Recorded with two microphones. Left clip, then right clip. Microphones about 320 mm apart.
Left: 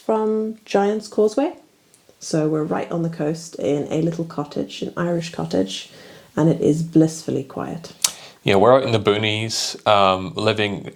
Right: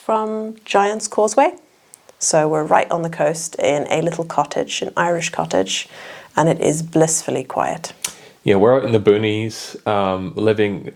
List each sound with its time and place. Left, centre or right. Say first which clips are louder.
0.0 s speech: even; right
8.0 s speech: right 2 dB; left